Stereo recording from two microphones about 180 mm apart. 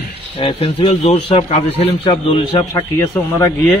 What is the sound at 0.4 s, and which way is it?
A man's voice, 30° left (ahead or behind).